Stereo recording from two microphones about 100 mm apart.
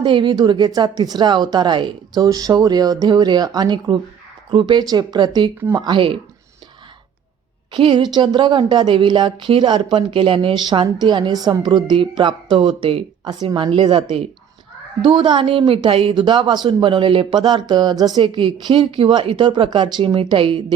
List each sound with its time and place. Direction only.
0.0 s speech: 50° right (ahead or behind)
7.7 s a woman's voice: 60° right (ahead or behind); by 18.2 s 40° right (ahead or behind)
18.2 s a woman's voice: 55° right (ahead or behind)